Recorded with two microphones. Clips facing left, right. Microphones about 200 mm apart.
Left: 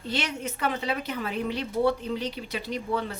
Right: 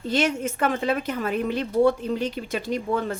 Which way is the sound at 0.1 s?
50° right (ahead or behind).